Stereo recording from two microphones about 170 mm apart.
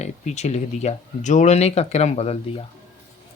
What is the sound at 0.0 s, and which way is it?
Speech, 40° left (ahead or behind).